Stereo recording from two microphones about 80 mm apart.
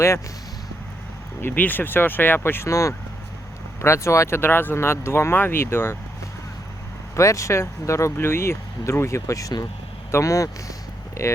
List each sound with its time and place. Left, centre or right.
1.4 s speech: left
7.2 s speech: left